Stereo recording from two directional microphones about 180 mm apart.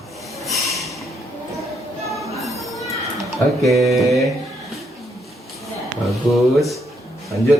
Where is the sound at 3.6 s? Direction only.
Centre (ahead or behind).